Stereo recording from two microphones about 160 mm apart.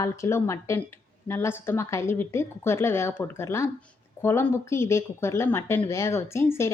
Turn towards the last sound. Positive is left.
turn(degrees=15)  # may be behind; listen again after turning